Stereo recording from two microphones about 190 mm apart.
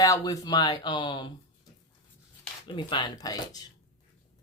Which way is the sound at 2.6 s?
25° left (ahead or behind).